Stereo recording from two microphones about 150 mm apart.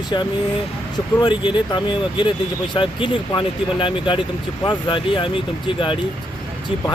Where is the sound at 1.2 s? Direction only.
30° left (ahead or behind).